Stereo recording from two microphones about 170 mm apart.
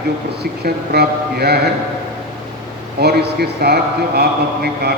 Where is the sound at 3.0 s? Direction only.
70° right (ahead or behind).